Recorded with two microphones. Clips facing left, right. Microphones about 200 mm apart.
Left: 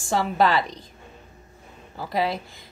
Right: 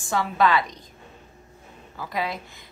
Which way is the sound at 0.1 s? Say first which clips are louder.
Left 1 dB; 30° left (ahead or behind).